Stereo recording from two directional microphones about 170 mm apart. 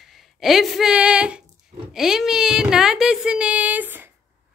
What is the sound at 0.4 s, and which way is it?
A woman's voice, centre (ahead or behind).